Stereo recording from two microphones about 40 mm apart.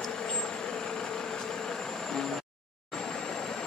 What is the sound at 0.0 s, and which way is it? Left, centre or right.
Vehicle, centre.